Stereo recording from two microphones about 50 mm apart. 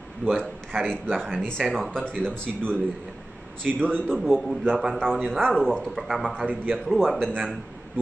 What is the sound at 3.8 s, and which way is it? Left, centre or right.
Speech, centre.